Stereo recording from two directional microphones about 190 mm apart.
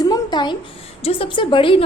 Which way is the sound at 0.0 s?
20° left (ahead or behind).